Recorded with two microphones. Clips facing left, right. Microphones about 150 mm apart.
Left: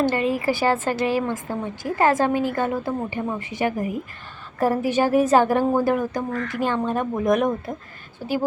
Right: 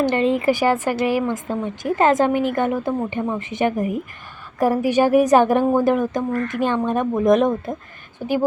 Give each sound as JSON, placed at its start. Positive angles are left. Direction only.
{"t": 0.0, "sound": "a woman's voice", "side_deg": -25}